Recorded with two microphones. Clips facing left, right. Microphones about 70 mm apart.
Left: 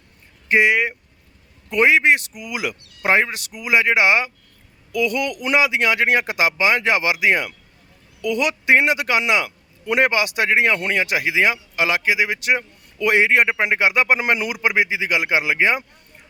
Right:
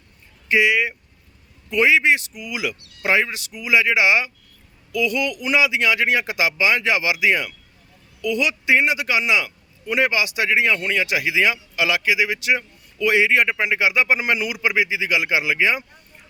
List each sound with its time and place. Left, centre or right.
0.4 s a man's voice: left